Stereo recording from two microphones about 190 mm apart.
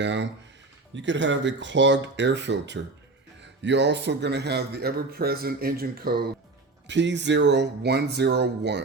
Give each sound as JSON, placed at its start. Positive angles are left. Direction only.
{"t": 0.0, "sound": "a man's voice", "side_deg": -70}
{"t": 6.8, "sound": "a man's voice", "side_deg": -70}